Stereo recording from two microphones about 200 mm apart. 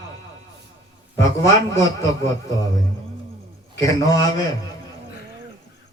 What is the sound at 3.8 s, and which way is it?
Speech, 20° left (ahead or behind).